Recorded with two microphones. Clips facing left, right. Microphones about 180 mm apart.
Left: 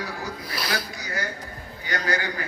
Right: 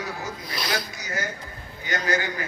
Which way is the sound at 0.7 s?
25° right (ahead or behind).